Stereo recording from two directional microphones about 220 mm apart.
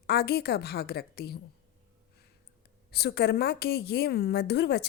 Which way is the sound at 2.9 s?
50° left (ahead or behind).